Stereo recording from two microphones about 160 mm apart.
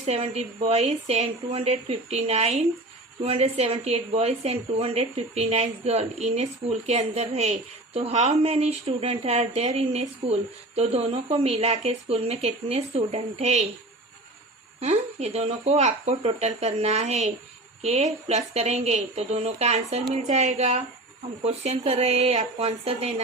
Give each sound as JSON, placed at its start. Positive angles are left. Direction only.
{"t": 0.0, "sound": "a woman's voice", "side_deg": -40}
{"t": 14.8, "sound": "a woman's voice", "side_deg": -40}